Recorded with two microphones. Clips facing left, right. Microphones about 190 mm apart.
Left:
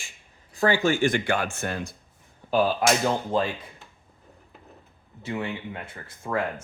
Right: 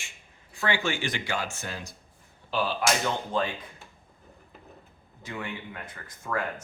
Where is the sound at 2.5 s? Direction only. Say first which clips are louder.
Left 7 dB; 45° left (ahead or behind).